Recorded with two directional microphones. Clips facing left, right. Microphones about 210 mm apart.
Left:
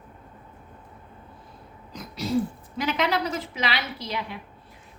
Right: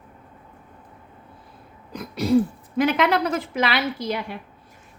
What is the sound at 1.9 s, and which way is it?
Throat clearing, 60° right (ahead or behind).